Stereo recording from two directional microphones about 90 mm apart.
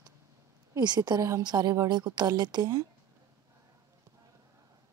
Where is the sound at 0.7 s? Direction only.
50° right (ahead or behind).